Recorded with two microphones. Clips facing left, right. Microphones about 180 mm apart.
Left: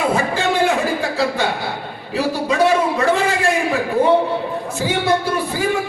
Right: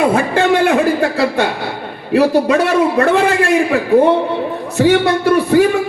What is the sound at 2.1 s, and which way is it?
A man's voice, 60° right (ahead or behind).